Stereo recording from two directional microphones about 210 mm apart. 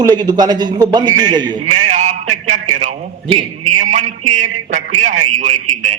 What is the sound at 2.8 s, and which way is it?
Speech, 30° right (ahead or behind).